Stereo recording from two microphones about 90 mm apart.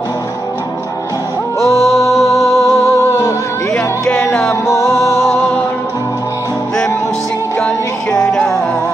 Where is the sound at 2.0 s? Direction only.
30° left (ahead or behind).